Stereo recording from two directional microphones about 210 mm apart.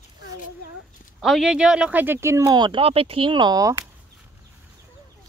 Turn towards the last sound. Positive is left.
turn(degrees=-15)  # may be behind; listen again after turning